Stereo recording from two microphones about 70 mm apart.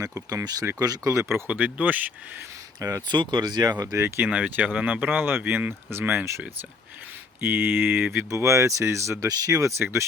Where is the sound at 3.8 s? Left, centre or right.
Right.